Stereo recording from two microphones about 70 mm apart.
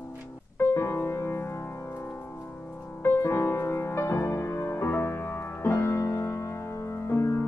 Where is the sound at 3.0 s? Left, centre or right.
Left.